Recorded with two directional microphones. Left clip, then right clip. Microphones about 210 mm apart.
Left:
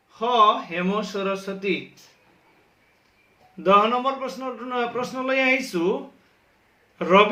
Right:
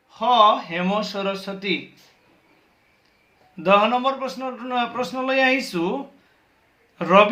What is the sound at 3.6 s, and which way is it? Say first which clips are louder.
A man's voice: right 1 dB; 40° right (ahead or behind).